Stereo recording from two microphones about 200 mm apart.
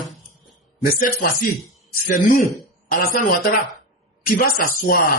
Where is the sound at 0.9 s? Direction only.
45° left (ahead or behind).